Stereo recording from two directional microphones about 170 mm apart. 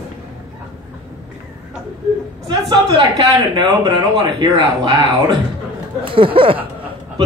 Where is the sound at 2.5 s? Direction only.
25° right (ahead or behind).